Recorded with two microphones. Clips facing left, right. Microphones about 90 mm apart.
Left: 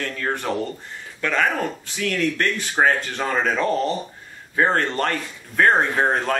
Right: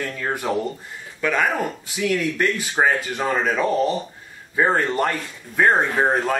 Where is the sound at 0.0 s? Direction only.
10° right (ahead or behind).